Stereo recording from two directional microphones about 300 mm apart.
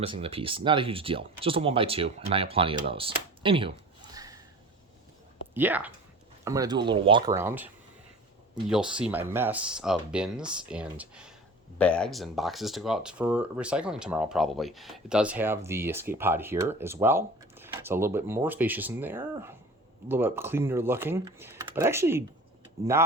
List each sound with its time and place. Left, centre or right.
0.0 s speech: centre
5.5 s speech: centre
8.7 s speech: centre